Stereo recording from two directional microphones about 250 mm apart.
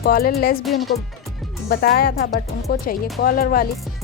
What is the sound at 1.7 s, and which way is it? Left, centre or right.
Speech, left.